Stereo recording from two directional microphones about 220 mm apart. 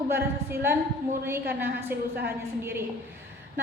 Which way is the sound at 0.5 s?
10° right (ahead or behind).